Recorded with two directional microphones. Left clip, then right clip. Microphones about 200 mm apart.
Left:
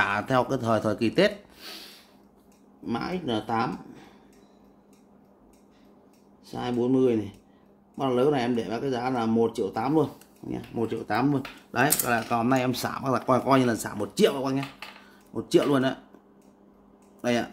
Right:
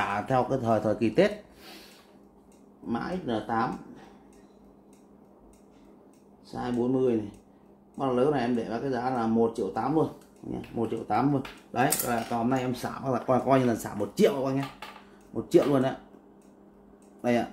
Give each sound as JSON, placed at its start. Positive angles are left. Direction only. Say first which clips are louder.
{"t": 0.0, "sound": "speech", "louder": "left 3 dB", "side_deg": 25}
{"t": 2.9, "sound": "speech", "louder": "left 2 dB", "side_deg": 40}
{"t": 6.5, "sound": "speech", "louder": "left 3 dB", "side_deg": 40}
{"t": 12.0, "sound": "speech", "louder": "left 3 dB", "side_deg": 40}
{"t": 17.2, "sound": "speech", "louder": "even", "side_deg": 20}